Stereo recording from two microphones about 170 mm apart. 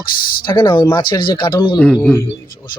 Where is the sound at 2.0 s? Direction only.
15° left (ahead or behind).